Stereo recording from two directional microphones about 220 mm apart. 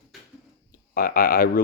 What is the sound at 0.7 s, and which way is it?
Speech, 40° left (ahead or behind).